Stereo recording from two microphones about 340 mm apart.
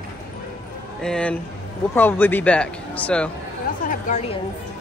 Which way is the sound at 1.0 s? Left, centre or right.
Centre.